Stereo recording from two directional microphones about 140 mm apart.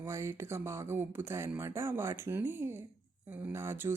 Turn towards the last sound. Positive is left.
turn(degrees=-15)  # may be behind; listen again after turning